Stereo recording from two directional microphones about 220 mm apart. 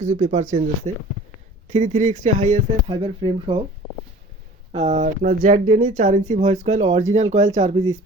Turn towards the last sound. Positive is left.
turn(degrees=-25)  # may be behind; listen again after turning